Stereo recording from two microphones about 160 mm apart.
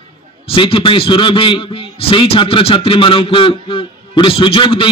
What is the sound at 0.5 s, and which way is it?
A man's voice, 35° left (ahead or behind).